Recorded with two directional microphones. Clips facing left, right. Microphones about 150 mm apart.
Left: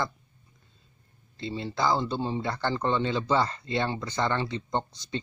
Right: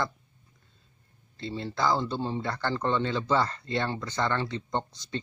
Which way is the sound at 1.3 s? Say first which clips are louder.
Left 1 dB; 15° left (ahead or behind).